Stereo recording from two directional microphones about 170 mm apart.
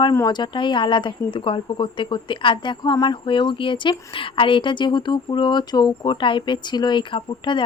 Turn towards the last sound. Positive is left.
turn(degrees=30)  # may be behind; listen again after turning